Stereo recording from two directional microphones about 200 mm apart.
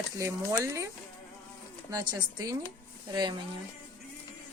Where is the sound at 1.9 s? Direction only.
20° right (ahead or behind).